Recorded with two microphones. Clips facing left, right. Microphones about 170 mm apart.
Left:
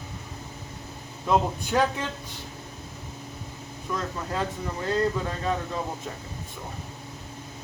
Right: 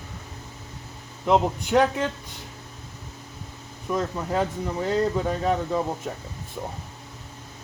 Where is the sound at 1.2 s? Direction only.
20° right (ahead or behind).